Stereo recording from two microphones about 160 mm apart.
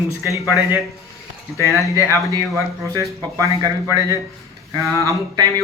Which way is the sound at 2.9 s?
20° right (ahead or behind).